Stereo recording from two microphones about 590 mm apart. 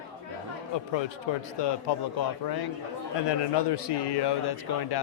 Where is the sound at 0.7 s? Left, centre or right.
Left.